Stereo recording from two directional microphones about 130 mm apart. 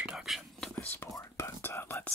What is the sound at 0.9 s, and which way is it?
Speech, 20° left (ahead or behind).